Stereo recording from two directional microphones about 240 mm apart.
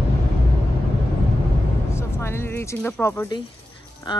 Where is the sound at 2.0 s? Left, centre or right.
Centre.